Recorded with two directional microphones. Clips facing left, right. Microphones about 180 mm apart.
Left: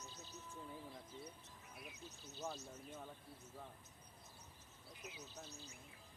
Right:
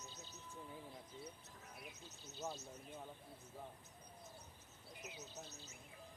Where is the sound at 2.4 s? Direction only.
5° right (ahead or behind).